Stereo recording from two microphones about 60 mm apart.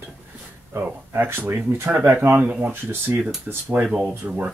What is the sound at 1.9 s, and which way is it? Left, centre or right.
Speech, right.